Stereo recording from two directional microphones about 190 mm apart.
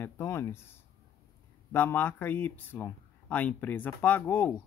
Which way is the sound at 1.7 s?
10° left (ahead or behind).